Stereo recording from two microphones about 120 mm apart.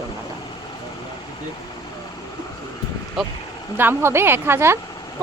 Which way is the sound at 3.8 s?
20° right (ahead or behind).